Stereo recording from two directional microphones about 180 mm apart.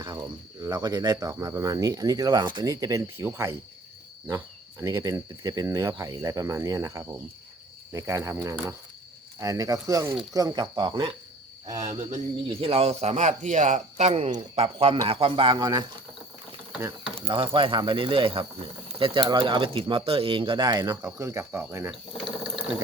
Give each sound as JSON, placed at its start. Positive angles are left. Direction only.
{"t": 0.0, "sound": "speech", "side_deg": -20}
{"t": 11.9, "sound": "speech", "side_deg": -40}
{"t": 17.2, "sound": "speech", "side_deg": -30}